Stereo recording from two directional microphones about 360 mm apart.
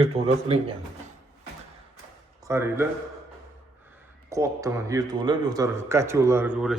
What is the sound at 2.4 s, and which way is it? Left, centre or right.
Speech, centre.